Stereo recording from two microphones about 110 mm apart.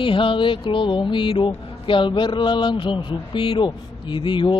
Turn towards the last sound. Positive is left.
turn(degrees=45)  # may be behind; listen again after turning